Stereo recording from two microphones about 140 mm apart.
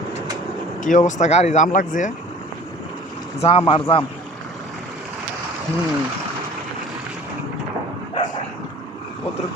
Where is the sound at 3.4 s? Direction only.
40° left (ahead or behind).